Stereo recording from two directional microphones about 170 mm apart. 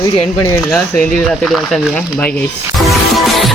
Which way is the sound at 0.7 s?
5° left (ahead or behind).